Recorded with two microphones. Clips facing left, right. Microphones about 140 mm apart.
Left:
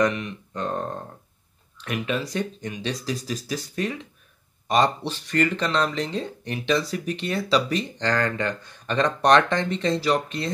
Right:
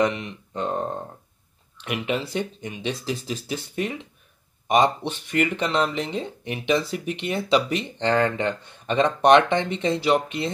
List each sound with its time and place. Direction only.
0.0 s speech: 25° right (ahead or behind)